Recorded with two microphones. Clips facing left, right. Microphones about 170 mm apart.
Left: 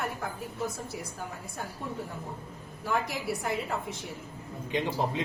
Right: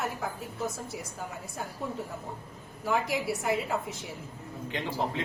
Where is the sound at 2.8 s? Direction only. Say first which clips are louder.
Right 2 dB; centre (ahead or behind).